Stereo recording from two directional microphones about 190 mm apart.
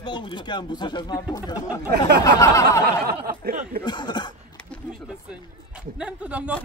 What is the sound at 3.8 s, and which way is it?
Speech, 25° left (ahead or behind).